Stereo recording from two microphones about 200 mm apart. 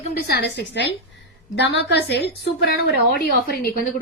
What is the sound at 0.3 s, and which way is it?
A woman's voice, 60° left (ahead or behind).